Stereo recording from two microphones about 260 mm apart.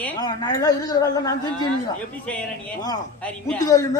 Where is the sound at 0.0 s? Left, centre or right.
Centre.